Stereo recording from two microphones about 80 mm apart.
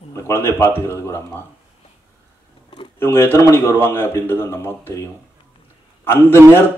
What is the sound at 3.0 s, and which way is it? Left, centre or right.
A man's voice, left.